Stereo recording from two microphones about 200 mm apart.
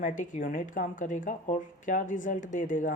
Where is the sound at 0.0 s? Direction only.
40° left (ahead or behind).